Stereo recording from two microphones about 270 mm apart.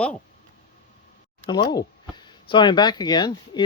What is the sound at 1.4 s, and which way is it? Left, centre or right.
Speech, centre.